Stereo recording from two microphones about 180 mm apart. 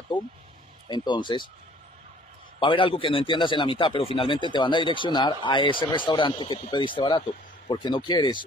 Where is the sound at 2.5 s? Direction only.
30° left (ahead or behind).